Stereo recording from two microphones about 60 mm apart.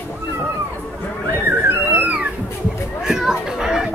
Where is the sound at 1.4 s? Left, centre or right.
Right.